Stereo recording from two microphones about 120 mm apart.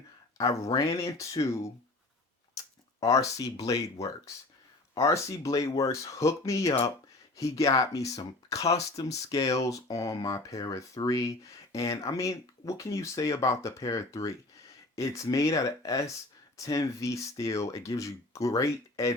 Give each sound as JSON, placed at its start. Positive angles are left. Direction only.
{"t": 0.3, "sound": "speech", "side_deg": 30}
{"t": 4.9, "sound": "speech", "side_deg": 25}